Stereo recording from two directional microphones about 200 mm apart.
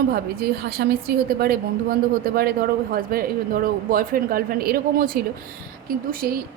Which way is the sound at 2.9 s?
45° right (ahead or behind).